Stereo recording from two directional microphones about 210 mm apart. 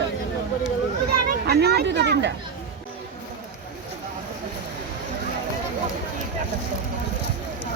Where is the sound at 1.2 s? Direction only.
50° right (ahead or behind).